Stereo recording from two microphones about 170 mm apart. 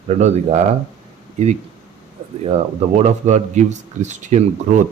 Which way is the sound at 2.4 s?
40° right (ahead or behind).